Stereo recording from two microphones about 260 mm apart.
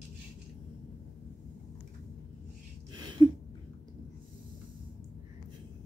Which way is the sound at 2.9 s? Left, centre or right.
Centre.